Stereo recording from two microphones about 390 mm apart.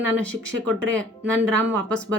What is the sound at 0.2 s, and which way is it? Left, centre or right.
Speech, centre.